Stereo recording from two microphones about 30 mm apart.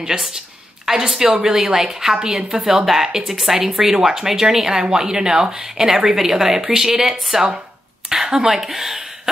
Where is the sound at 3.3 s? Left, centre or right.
Centre.